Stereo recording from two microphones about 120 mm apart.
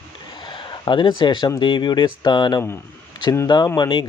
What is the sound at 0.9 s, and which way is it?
Speech, 40° left (ahead or behind).